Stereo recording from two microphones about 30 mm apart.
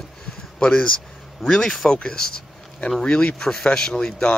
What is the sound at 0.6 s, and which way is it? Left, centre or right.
Speech, left.